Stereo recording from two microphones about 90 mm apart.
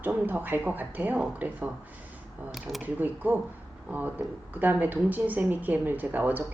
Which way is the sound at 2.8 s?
20° right (ahead or behind).